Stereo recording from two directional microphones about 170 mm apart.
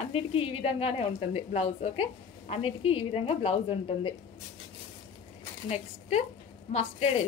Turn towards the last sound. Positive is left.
turn(degrees=35)  # may be behind; listen again after turning